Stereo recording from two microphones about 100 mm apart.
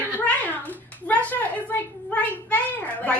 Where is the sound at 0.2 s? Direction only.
15° left (ahead or behind).